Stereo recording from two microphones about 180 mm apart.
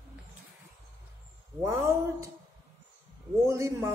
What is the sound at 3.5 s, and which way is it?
Speech, 15° right (ahead or behind).